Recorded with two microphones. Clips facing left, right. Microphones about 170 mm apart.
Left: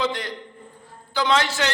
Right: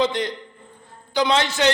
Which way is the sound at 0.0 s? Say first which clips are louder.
Right 4 dB; 20° right (ahead or behind).